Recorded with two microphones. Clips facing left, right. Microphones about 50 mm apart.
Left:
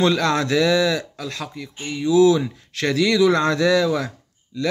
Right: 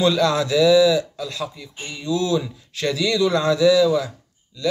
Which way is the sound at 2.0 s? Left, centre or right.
Left.